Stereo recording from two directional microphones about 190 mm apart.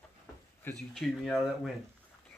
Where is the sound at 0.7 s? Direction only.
10° left (ahead or behind).